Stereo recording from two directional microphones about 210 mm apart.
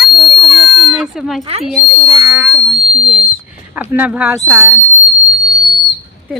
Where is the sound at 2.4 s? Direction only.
Centre (ahead or behind).